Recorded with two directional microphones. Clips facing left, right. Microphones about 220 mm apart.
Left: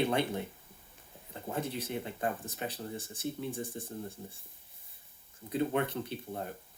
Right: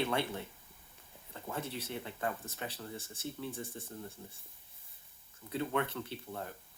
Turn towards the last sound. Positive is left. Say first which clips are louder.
# left 4 dB
turn(degrees=20)  # may be behind; listen again after turning